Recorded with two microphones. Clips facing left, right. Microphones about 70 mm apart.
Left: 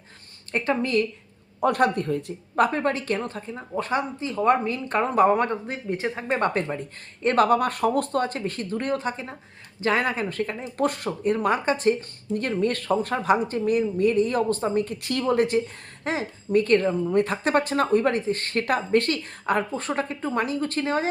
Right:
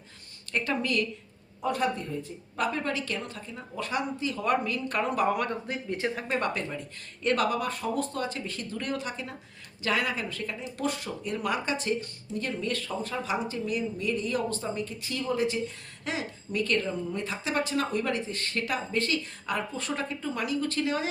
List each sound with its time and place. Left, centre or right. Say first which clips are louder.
0.5 s a woman's voice: left 5 dB; left
1.6 s speech: left 7 dB; left
2.6 s a woman's voice: left 7 dB; left
16.0 s a woman's voice: left 6 dB; left